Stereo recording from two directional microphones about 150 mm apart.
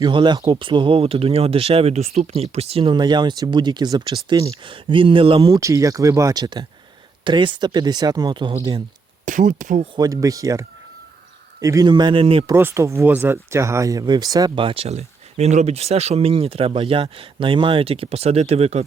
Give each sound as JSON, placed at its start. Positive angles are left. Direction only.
{"t": 0.0, "sound": "speech", "side_deg": -30}
{"t": 5.5, "sound": "speech", "side_deg": -20}
{"t": 9.2, "sound": "speech", "side_deg": -60}
{"t": 9.9, "sound": "speech", "side_deg": -25}
{"t": 12.5, "sound": "speech", "side_deg": -15}